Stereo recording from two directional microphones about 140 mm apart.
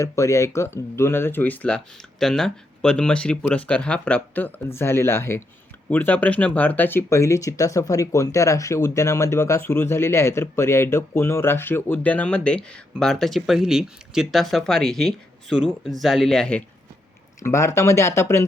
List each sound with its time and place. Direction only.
0.0 s speech: 20° left (ahead or behind)
17.4 s speech: 20° left (ahead or behind)